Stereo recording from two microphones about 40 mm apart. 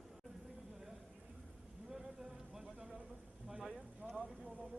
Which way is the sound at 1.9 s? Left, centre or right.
Centre.